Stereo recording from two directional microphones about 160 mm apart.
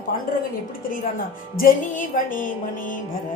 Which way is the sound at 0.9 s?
60° left (ahead or behind).